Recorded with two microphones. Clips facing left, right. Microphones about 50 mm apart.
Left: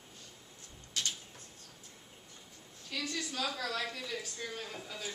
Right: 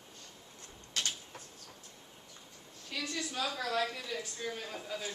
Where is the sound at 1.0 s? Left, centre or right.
Right.